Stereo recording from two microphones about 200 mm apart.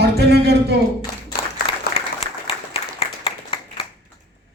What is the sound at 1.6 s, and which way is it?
Applause, 50° left (ahead or behind).